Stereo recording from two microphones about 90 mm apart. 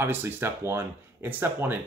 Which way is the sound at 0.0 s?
25° right (ahead or behind).